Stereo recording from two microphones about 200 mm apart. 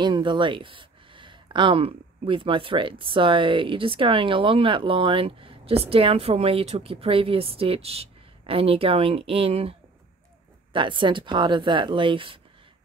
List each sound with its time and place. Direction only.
0.0 s speech: 25° right (ahead or behind)